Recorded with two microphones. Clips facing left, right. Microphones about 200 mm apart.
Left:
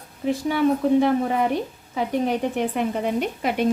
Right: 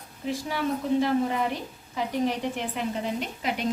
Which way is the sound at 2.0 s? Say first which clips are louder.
Left 4 dB; 55° left (ahead or behind).